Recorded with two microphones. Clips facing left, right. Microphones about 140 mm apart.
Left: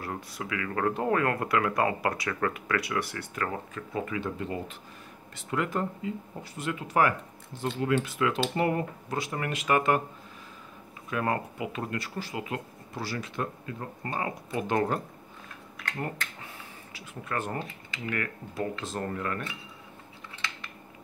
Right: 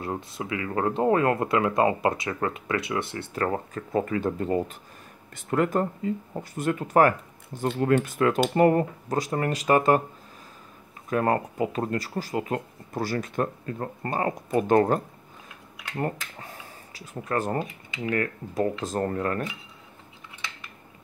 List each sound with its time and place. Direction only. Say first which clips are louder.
0.0 s speech: right 4 dB; 25° right (ahead or behind)
11.1 s speech: right 5 dB; 40° right (ahead or behind)
16.3 s a sound: right 3 dB; 40° right (ahead or behind)
18.1 s speech: right 7 dB; 35° right (ahead or behind)